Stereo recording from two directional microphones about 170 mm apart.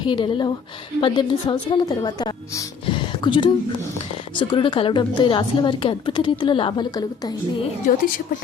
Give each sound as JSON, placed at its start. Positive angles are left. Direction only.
{"t": 0.0, "sound": "a woman's voice", "side_deg": 30}
{"t": 7.9, "sound": "a woman's voice", "side_deg": 50}